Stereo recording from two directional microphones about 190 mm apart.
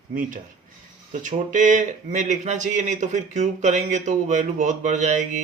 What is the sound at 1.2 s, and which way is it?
Speech, 40° right (ahead or behind).